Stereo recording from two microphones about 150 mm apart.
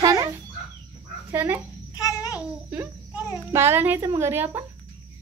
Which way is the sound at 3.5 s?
15° right (ahead or behind).